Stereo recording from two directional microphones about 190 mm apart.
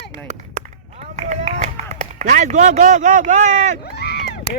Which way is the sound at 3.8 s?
55° left (ahead or behind).